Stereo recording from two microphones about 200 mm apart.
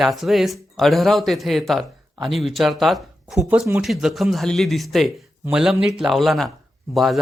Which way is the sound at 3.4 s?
10° right (ahead or behind).